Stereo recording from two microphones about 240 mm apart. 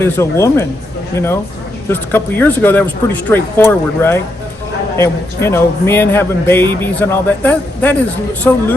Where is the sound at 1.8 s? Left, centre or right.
Centre.